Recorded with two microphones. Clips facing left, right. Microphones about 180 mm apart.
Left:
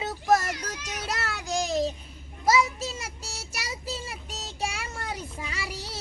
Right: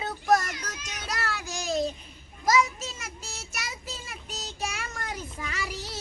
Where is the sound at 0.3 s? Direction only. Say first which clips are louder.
Left 1 dB; 25° left (ahead or behind).